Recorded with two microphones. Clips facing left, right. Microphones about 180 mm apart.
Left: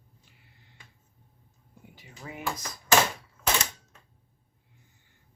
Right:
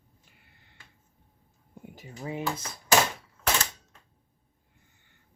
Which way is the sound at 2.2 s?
30° right (ahead or behind).